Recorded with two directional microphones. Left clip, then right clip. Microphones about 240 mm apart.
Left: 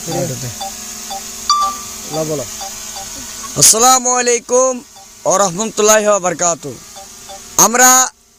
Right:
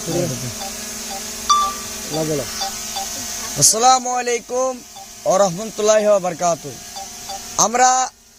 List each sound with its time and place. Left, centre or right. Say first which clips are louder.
0.6 s chime: left 2 dB; centre
3.6 s a man's voice: left 4 dB; left